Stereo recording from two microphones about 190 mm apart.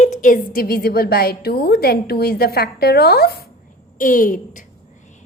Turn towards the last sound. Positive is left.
turn(degrees=45)  # may be behind; listen again after turning